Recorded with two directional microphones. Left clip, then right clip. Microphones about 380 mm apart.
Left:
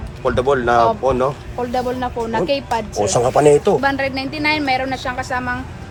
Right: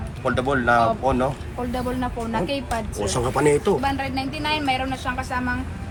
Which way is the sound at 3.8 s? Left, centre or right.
Left.